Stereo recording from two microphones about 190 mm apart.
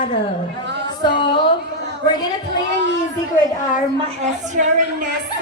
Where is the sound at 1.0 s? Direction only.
25° left (ahead or behind).